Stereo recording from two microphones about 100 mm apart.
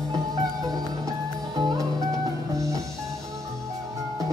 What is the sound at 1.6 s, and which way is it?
Music, 40° right (ahead or behind).